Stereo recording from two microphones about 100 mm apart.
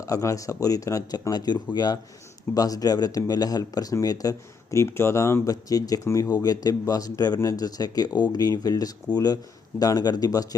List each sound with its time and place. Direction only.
0.0 s speech: 35° left (ahead or behind)